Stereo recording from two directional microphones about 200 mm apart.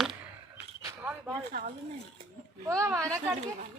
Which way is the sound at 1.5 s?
45° right (ahead or behind).